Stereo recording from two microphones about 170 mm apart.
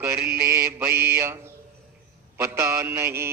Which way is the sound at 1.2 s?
15° right (ahead or behind).